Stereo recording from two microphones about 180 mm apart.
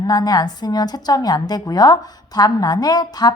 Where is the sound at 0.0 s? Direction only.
20° left (ahead or behind).